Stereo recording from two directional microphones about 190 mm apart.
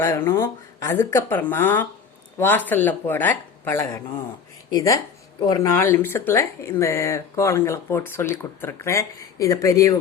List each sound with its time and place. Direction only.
0.0 s speech: 15° left (ahead or behind)